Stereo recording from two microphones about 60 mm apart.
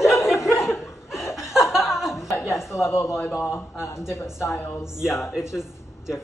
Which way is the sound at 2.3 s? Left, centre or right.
Left.